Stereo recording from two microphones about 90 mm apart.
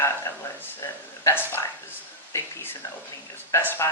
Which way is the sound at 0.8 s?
25° left (ahead or behind).